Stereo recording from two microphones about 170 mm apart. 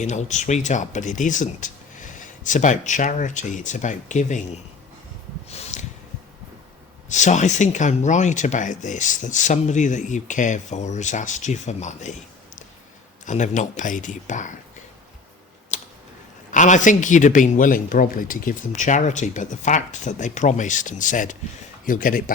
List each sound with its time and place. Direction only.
0.0 s speech: 45° left (ahead or behind)
5.5 s snort: 40° left (ahead or behind)
7.1 s speech: 45° left (ahead or behind)
13.2 s speech: 45° left (ahead or behind)
15.7 s a sound: 45° left (ahead or behind)
16.5 s speech: 45° left (ahead or behind)